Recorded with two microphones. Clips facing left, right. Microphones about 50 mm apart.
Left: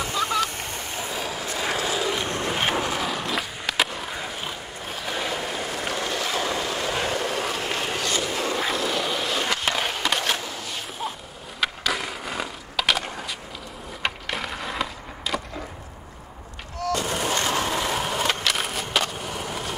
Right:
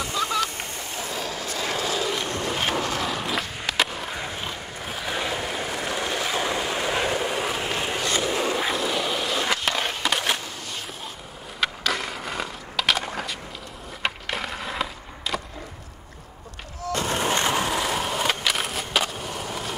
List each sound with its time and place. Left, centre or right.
0.0 s goose: centre
1.0 s train: centre
1.5 s vehicle: centre
1.8 s vehicle: centre
2.2 s boat: left
3.0 s skateboard: centre
8.0 s skateboard: right
8.4 s skateboard: centre
11.6 s skateboard: centre
16.9 s fireworks: right
17.6 s skateboard: centre